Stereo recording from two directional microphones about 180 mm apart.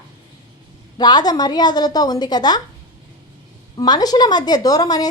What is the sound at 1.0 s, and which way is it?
A woman's voice, 25° left (ahead or behind).